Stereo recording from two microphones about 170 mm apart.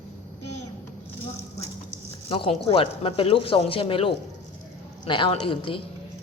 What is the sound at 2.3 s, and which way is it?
A woman's voice, 35° left (ahead or behind).